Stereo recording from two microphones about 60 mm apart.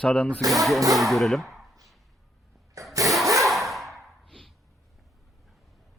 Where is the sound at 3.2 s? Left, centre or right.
Right.